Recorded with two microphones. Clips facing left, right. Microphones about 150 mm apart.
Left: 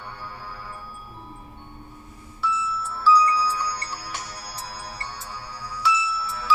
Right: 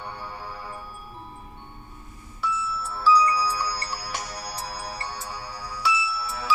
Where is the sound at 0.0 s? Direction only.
20° right (ahead or behind).